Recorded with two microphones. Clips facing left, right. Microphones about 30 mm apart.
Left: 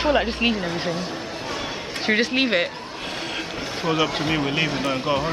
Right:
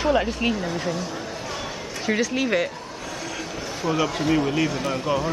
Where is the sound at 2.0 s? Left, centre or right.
Left.